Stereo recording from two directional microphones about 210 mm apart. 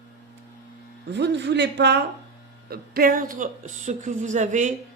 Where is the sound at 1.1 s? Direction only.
55° right (ahead or behind).